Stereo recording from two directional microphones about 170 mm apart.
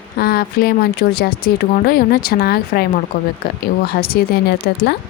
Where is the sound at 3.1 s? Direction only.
50° left (ahead or behind).